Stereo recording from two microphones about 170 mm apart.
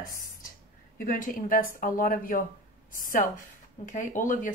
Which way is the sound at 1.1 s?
55° left (ahead or behind).